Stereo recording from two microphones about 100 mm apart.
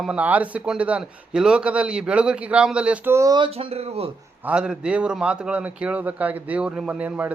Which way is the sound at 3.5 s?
80° right.